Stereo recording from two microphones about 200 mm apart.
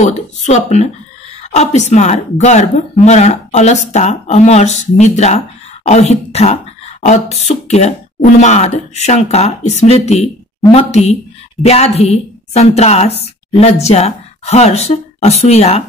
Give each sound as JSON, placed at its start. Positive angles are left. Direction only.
{"t": 0.0, "sound": "a woman's voice", "side_deg": 35}